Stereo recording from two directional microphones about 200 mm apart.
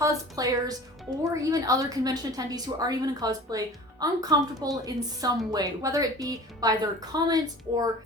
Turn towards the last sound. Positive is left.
turn(degrees=-20)  # may be behind; listen again after turning